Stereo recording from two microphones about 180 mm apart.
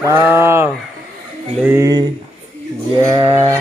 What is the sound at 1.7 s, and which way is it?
Speech, 20° right (ahead or behind).